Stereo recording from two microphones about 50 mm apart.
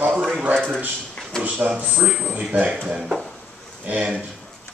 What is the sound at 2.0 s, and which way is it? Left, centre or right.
Speech, right.